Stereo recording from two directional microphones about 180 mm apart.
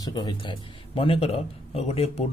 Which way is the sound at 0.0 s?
25° left (ahead or behind).